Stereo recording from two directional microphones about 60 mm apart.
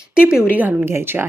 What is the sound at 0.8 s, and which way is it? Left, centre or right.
Speech, right.